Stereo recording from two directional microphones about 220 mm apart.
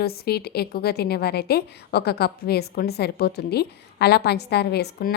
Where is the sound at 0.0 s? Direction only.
45° left (ahead or behind).